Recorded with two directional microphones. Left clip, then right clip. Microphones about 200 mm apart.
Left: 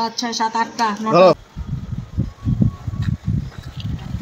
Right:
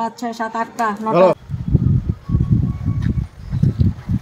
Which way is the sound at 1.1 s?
25° left (ahead or behind).